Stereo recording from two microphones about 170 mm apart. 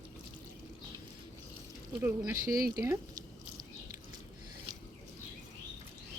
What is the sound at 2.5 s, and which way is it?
Speech, 60° right (ahead or behind).